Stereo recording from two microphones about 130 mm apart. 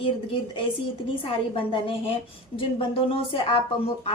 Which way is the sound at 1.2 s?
45° left (ahead or behind).